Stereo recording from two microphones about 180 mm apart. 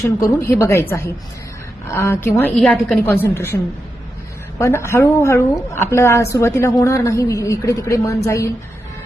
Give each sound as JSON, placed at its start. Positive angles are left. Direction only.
{"t": 0.0, "sound": "a woman's voice", "side_deg": 15}